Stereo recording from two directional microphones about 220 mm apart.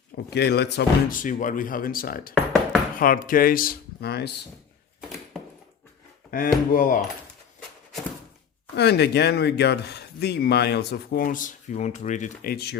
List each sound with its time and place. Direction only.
0.3 s speech: 50° left (ahead or behind)
4.9 s a sound: centre (ahead or behind)
6.3 s speech: 40° left (ahead or behind)
8.7 s speech: 50° left (ahead or behind)